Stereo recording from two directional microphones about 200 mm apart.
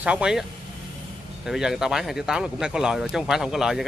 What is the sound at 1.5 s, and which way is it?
Speech, centre (ahead or behind).